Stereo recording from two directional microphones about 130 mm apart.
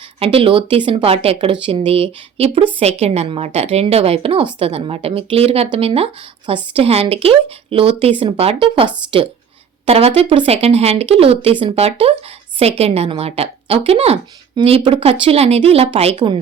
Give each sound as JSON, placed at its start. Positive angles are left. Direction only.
{"t": 0.2, "sound": "a woman's voice", "side_deg": -45}
{"t": 14.5, "sound": "a woman's voice", "side_deg": -40}